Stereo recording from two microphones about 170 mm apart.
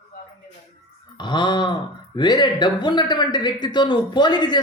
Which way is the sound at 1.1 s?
25° left (ahead or behind).